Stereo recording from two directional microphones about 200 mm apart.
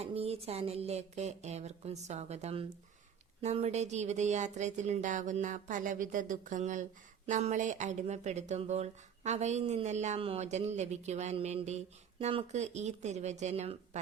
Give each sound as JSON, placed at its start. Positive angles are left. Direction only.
{"t": 0.0, "sound": "speech", "side_deg": -30}